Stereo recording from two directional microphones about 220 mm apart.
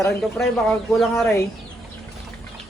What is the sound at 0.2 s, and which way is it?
Speech, centre (ahead or behind).